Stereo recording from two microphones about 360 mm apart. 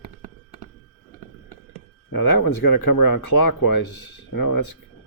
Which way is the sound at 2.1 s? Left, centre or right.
Left.